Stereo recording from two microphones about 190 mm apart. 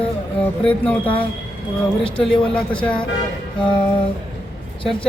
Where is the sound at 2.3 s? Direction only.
25° left (ahead or behind).